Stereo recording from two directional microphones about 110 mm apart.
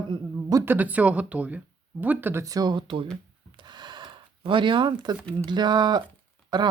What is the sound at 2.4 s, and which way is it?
Speech, 35° right (ahead or behind).